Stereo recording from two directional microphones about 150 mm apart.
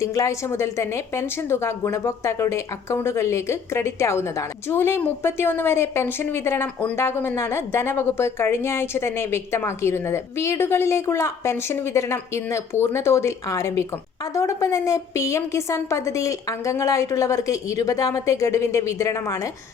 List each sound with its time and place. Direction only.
0.0 s a woman's voice: 20° left (ahead or behind)